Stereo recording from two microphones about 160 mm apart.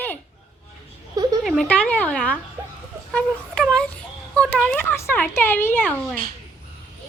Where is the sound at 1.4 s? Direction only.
Centre (ahead or behind).